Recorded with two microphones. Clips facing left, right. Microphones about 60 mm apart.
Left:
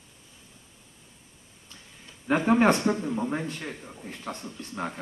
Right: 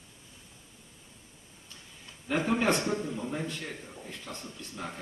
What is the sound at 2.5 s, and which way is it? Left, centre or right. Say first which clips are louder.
A man's voice: left 7 dB; left.